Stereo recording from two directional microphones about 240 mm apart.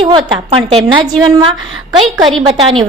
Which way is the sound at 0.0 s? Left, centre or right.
Right.